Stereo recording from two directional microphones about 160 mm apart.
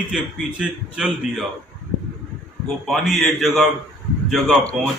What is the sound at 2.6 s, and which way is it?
A man's voice, centre (ahead or behind).